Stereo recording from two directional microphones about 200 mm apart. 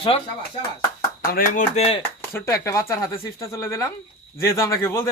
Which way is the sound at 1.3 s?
45° left (ahead or behind).